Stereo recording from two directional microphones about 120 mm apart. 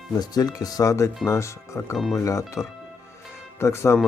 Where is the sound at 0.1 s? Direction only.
35° left (ahead or behind).